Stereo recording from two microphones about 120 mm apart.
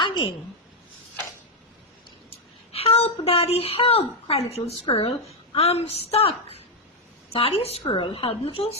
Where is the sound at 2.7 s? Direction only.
55° left (ahead or behind).